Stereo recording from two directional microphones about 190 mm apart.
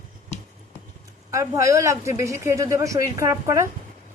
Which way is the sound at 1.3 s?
15° right (ahead or behind).